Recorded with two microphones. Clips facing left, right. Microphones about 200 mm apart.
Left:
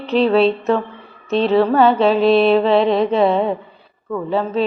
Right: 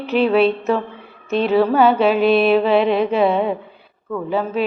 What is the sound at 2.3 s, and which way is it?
Mantra, 30° left (ahead or behind).